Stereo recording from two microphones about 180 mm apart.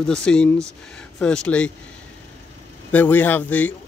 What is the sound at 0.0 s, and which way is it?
Speech, 5° left (ahead or behind).